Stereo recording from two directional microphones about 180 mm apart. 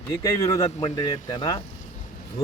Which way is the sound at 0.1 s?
20° left (ahead or behind).